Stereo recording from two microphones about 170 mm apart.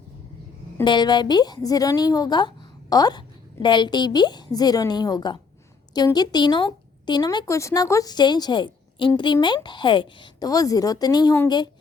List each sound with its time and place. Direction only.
0.9 s a woman's voice: 25° left (ahead or behind)